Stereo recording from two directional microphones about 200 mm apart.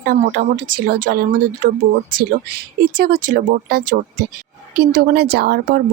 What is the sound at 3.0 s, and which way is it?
Speech, 50° right (ahead or behind).